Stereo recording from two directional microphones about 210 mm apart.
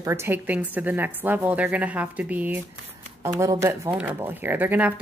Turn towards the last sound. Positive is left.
turn(degrees=-10)  # may be behind; listen again after turning